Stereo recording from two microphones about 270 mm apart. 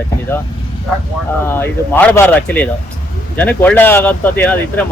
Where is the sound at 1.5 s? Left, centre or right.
Centre.